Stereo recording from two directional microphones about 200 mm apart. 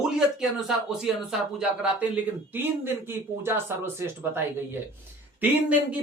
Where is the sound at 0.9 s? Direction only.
Centre (ahead or behind).